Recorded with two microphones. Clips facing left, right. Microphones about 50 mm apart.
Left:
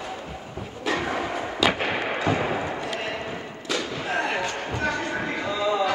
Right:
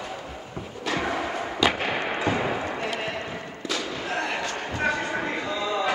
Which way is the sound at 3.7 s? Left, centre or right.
Centre.